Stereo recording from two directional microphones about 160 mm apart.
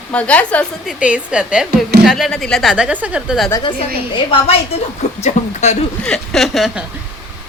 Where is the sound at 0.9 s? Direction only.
5° right (ahead or behind).